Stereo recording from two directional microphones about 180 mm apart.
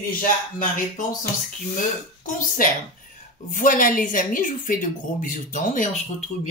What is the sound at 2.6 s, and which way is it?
Speech, 50° left (ahead or behind).